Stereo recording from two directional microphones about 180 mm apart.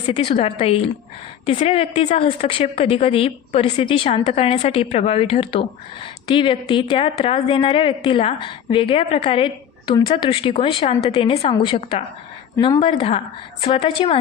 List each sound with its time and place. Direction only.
0.1 s a woman's voice: 30° left (ahead or behind)